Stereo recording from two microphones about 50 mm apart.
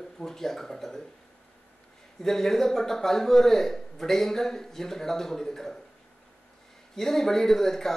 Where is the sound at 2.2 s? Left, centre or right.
Centre.